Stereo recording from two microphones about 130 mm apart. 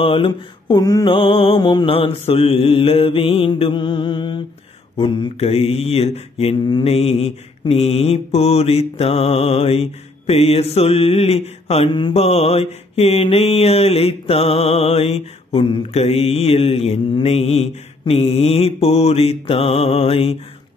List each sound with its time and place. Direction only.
0.0 s mantra: 45° left (ahead or behind)
1.1 s mantra: 45° left (ahead or behind)
2.0 s mantra: 50° left (ahead or behind)
12.1 s mantra: 55° left (ahead or behind)